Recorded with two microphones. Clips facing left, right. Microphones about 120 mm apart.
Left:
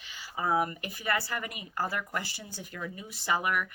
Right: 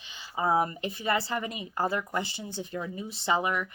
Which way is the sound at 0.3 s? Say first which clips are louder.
Right 3 dB; 25° right (ahead or behind).